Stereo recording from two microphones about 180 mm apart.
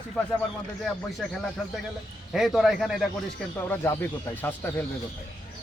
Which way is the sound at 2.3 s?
Centre (ahead or behind).